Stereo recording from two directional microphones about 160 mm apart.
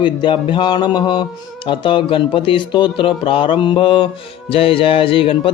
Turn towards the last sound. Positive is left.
turn(degrees=35)  # may be behind; listen again after turning